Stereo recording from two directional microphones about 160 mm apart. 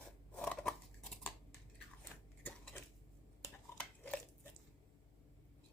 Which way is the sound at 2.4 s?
10° left (ahead or behind).